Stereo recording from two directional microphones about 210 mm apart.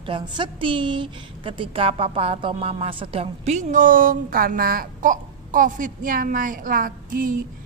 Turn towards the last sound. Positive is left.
turn(degrees=-40)  # may be behind; listen again after turning